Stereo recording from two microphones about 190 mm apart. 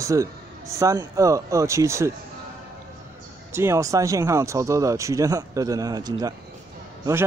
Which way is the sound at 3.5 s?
15° right (ahead or behind).